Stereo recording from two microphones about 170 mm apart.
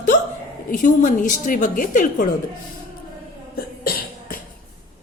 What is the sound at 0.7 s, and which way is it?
Speech, 50° left (ahead or behind).